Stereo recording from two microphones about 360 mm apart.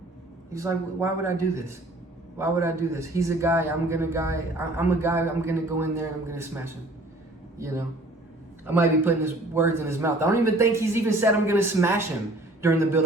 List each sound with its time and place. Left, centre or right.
0.5 s a man's voice: centre
7.6 s a man's voice: centre